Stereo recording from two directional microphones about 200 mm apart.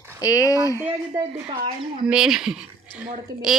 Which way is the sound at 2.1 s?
5° right (ahead or behind).